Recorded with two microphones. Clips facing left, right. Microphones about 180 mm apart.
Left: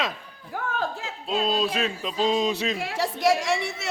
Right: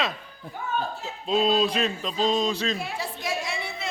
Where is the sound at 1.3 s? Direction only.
Centre (ahead or behind).